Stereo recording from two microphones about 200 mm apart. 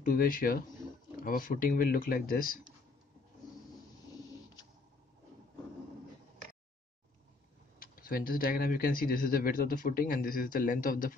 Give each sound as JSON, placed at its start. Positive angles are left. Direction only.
{"t": 0.0, "sound": "speech", "side_deg": 45}
{"t": 7.8, "sound": "speech", "side_deg": 45}